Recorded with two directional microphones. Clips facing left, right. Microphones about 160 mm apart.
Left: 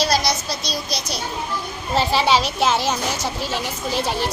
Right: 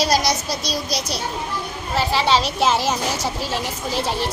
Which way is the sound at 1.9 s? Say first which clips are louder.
Left 1 dB; 15° left (ahead or behind).